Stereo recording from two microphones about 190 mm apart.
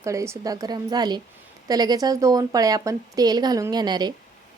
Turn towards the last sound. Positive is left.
turn(degrees=-20)  # may be behind; listen again after turning